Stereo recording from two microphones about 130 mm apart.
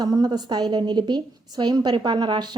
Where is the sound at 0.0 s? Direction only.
30° right (ahead or behind).